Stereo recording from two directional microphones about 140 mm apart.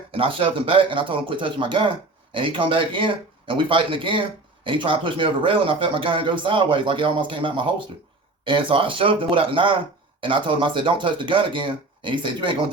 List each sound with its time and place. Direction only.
0.1 s speech: 40° right (ahead or behind)